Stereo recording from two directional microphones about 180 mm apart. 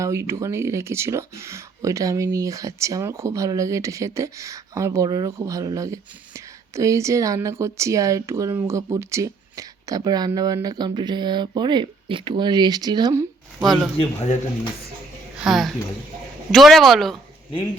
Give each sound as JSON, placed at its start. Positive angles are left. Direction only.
{"t": 0.0, "sound": "speech", "side_deg": -15}
{"t": 13.6, "sound": "speech", "side_deg": -5}
{"t": 14.0, "sound": "a man's voice", "side_deg": 35}
{"t": 15.4, "sound": "speech", "side_deg": 0}